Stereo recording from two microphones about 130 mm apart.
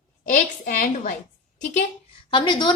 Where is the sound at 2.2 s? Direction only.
40° left (ahead or behind).